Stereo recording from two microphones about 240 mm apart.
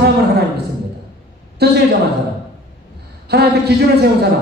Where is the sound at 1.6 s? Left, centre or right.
Right.